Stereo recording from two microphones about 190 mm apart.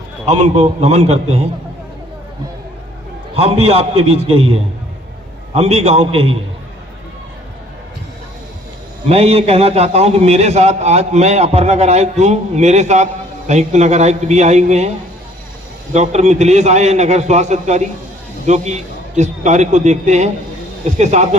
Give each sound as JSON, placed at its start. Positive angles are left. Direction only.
{"t": 0.3, "sound": "a man's voice", "side_deg": -35}
{"t": 3.3, "sound": "a man's voice", "side_deg": -30}
{"t": 9.0, "sound": "a man's voice", "side_deg": -35}